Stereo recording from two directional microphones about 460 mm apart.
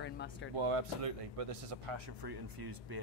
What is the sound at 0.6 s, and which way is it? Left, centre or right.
Speech, right.